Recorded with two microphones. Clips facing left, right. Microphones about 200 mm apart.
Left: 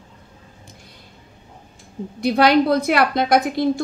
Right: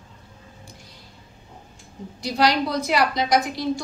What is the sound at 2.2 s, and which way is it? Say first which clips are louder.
A woman's voice: left 6 dB; 55° left (ahead or behind).